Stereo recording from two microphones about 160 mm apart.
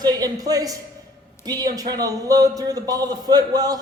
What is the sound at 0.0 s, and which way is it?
Speech, 25° right (ahead or behind).